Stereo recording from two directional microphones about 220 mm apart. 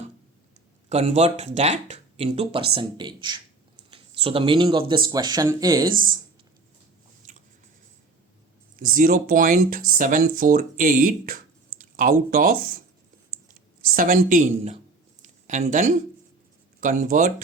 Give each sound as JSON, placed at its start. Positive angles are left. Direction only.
{"t": 0.9, "sound": "speech", "side_deg": -30}
{"t": 5.9, "sound": "speech", "side_deg": -40}
{"t": 9.0, "sound": "speech", "side_deg": -40}
{"t": 13.9, "sound": "speech", "side_deg": -40}
{"t": 15.2, "sound": "a sound", "side_deg": -35}
{"t": 16.8, "sound": "speech", "side_deg": -35}